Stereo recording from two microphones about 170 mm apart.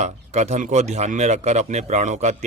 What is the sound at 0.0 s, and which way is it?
A man's voice, 40° right (ahead or behind).